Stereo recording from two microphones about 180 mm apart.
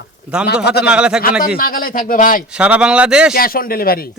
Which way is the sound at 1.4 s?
55° left (ahead or behind).